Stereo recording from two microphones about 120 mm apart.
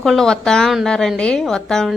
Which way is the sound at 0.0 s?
5° left (ahead or behind).